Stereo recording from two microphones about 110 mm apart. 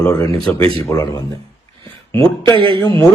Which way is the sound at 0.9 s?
30° left (ahead or behind).